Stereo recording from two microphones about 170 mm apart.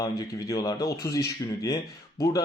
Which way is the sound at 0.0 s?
20° left (ahead or behind).